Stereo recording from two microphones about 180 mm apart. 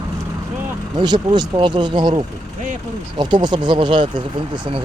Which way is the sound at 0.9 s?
25° right (ahead or behind).